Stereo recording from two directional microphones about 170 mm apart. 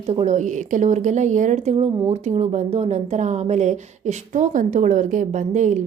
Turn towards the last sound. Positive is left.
turn(degrees=-45)  # may be behind; listen again after turning